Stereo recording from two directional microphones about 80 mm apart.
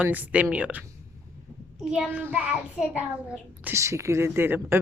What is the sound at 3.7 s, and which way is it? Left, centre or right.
Speech, right.